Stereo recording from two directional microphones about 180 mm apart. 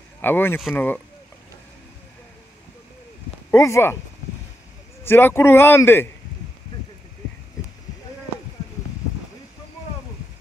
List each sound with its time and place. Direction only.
0.2 s a man's voice: 10° left (ahead or behind)
3.5 s a man's voice: 15° left (ahead or behind)
5.0 s a man's voice: 15° left (ahead or behind)